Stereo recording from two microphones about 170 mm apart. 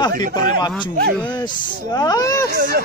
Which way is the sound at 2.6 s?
65° right (ahead or behind).